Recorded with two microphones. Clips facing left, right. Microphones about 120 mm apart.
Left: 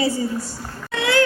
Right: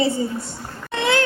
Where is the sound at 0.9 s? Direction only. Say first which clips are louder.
Even; 25° right (ahead or behind).